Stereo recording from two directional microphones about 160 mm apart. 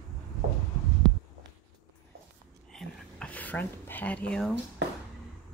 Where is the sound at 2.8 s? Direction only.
5° left (ahead or behind).